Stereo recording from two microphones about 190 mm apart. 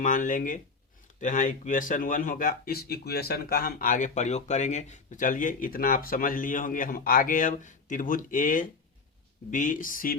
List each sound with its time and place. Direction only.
0.0 s speech: 40° left (ahead or behind)